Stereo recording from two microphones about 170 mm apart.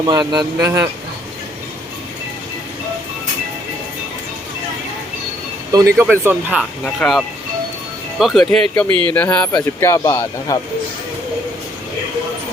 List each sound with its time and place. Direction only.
0.0 s speech: 25° right (ahead or behind)
5.7 s speech: 20° right (ahead or behind)
6.1 s speech: 5° right (ahead or behind)
6.8 s speech: 5° left (ahead or behind)
8.9 s speech: 30° right (ahead or behind)
9.1 s speech: 10° left (ahead or behind)